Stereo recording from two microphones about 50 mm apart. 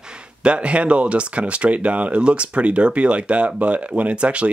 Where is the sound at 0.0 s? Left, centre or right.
Centre.